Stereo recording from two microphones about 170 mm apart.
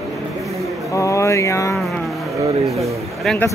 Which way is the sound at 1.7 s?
Centre (ahead or behind).